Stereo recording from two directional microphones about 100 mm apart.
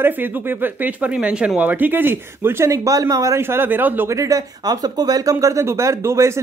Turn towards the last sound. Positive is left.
turn(degrees=-30)  # may be behind; listen again after turning